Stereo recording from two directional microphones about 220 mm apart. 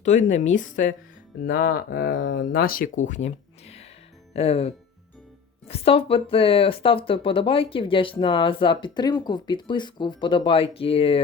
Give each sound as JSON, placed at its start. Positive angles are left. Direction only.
{"t": 0.0, "sound": "speech", "side_deg": 35}
{"t": 2.5, "sound": "speech", "side_deg": 40}